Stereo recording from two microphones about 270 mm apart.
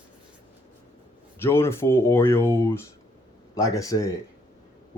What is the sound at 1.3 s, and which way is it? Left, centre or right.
Speech, centre.